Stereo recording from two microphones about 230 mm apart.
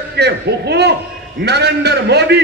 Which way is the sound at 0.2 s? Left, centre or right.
Right.